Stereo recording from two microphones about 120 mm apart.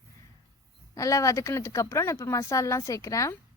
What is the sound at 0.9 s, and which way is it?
Speech, 25° left (ahead or behind).